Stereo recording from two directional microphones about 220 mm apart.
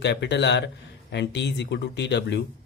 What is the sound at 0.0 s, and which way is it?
Speech, 50° left (ahead or behind).